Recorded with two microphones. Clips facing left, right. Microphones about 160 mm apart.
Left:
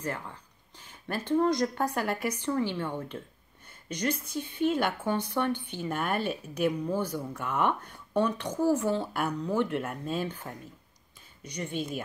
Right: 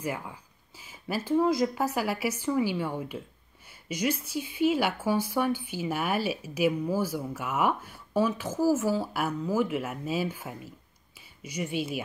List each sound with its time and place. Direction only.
0.0 s speech: 10° right (ahead or behind)